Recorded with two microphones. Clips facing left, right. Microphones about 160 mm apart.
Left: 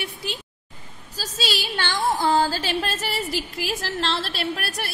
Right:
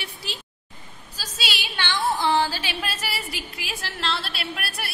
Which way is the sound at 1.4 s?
40° left (ahead or behind).